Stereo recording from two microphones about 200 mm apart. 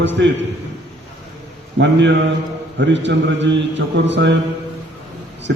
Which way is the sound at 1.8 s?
65° right (ahead or behind).